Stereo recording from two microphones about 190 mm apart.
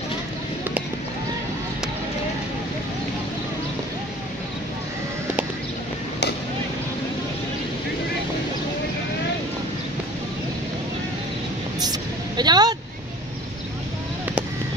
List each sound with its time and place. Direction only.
11.8 s vehicle: 20° right (ahead or behind)